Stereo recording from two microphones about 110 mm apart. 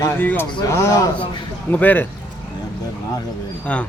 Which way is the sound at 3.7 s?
10° left (ahead or behind).